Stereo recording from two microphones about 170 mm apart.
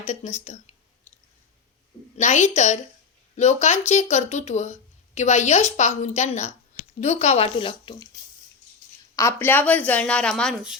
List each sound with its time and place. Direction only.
0.0 s speech: 40° left (ahead or behind)
2.1 s speech: 45° left (ahead or behind)
9.1 s a woman's voice: 15° left (ahead or behind)